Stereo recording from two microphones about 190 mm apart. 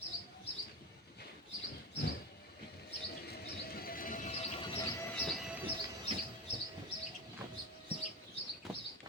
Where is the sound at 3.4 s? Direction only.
55° left (ahead or behind); by 5.0 s 20° left (ahead or behind).